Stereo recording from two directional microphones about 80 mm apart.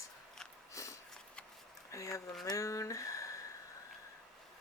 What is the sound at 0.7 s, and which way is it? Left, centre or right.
Sniff, left.